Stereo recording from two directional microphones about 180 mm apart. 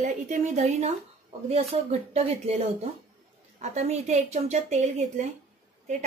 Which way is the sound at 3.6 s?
40° right (ahead or behind).